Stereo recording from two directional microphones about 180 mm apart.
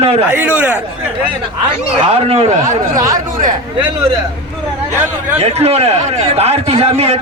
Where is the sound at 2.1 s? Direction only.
35° right (ahead or behind).